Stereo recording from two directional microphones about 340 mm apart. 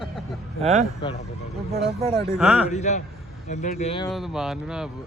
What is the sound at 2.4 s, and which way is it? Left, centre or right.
Speech, centre.